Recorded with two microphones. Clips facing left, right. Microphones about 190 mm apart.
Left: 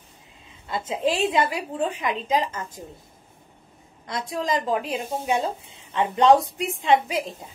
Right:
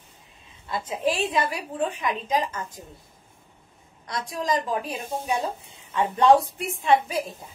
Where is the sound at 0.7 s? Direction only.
25° left (ahead or behind).